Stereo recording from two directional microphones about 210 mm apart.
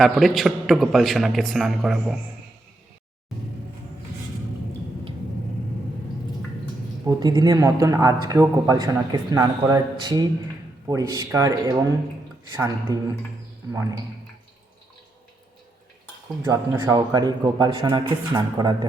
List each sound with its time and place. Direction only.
0.0 s a man's voice: centre (ahead or behind)
7.0 s a man's voice: 20° right (ahead or behind)
16.4 s speech: 10° right (ahead or behind)